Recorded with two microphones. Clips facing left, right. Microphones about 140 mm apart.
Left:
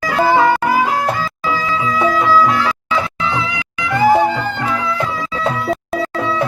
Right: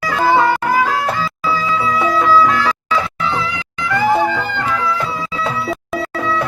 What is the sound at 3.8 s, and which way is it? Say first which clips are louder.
Music: left 3 dB; 15° left (ahead or behind).